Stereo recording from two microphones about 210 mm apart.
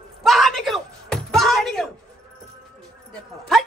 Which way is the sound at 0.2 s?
Centre (ahead or behind).